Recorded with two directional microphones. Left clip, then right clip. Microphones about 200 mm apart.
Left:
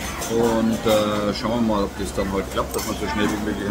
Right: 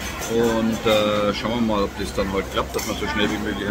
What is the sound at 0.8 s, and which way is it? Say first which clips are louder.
Speech: right 2 dB; centre (ahead or behind).